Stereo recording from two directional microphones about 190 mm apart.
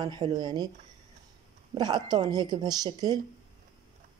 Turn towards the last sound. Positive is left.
turn(degrees=-20)  # may be behind; listen again after turning